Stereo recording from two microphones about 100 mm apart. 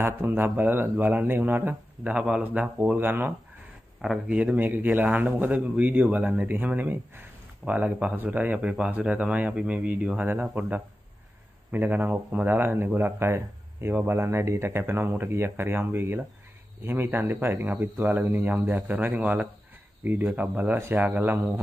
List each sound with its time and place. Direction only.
0.0 s speech: 20° right (ahead or behind)
4.0 s speech: centre (ahead or behind)
4.4 s a man's voice: 15° right (ahead or behind)